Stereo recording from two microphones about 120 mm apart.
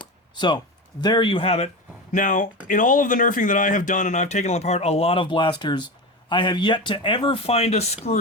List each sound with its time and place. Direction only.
0.3 s speech: 40° left (ahead or behind); by 1.7 s 60° left (ahead or behind)
2.1 s speech: 90° left; by 8.2 s 65° left (ahead or behind)